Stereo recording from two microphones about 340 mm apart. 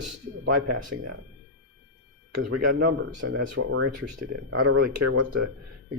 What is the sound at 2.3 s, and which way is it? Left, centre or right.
Speech, right.